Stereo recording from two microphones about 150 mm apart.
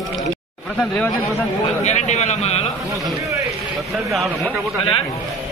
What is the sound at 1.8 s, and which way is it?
Speech, 50° left (ahead or behind).